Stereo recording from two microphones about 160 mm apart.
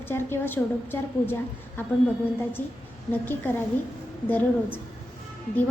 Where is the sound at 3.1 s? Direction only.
15° left (ahead or behind).